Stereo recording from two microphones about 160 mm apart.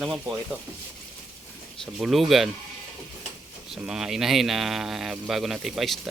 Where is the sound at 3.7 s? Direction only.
5° right (ahead or behind).